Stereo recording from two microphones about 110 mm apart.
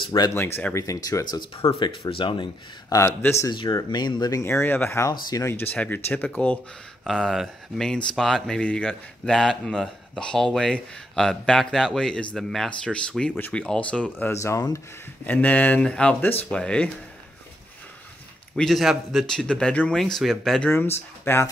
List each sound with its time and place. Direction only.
0.3 s speech: 20° left (ahead or behind)
0.7 s speech: 30° left (ahead or behind)
1.8 s speech: 50° left (ahead or behind)
2.9 s speech: 25° left (ahead or behind)
3.4 s speech: 40° left (ahead or behind)
4.5 s speech: 20° left (ahead or behind)
7.1 s speech: 5° left (ahead or behind); by 14.8 s 30° left (ahead or behind)
15.2 s speech: 15° left (ahead or behind)
18.6 s speech: centre (ahead or behind)
21.2 s speech: 20° left (ahead or behind)